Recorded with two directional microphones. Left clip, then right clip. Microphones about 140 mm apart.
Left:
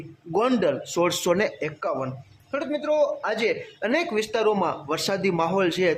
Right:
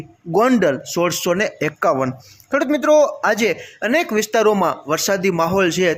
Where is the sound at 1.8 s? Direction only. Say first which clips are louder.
Right 12 dB; 65° right (ahead or behind).